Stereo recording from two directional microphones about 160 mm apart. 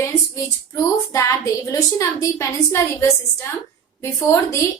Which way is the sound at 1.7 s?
20° left (ahead or behind).